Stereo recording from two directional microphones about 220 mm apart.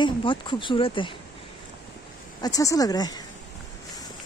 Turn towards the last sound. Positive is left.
turn(degrees=15)  # may be behind; listen again after turning